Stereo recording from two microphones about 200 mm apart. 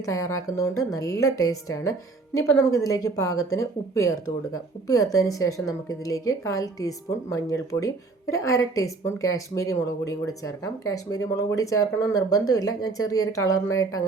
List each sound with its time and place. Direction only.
0.0 s speech: 15° left (ahead or behind)